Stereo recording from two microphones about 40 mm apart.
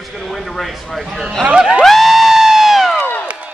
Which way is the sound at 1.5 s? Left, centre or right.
Right.